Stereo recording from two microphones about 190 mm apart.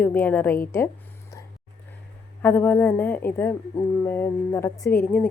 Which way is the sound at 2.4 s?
10° left (ahead or behind).